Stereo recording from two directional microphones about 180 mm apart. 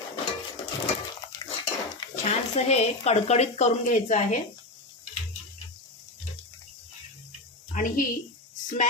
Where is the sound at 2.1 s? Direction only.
40° left (ahead or behind).